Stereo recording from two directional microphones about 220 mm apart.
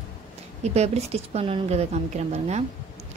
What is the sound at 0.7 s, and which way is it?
A woman's voice, 30° right (ahead or behind).